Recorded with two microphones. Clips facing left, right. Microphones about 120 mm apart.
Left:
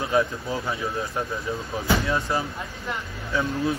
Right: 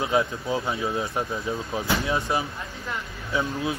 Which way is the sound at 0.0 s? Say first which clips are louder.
Left 1 dB; 20° right (ahead or behind).